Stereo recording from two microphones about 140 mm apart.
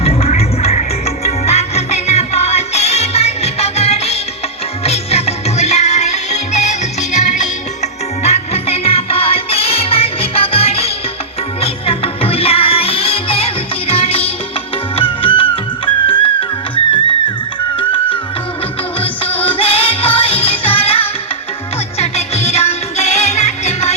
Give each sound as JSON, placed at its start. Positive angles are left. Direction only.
{"t": 0.0, "sound": "music", "side_deg": 45}
{"t": 18.9, "sound": "music", "side_deg": 40}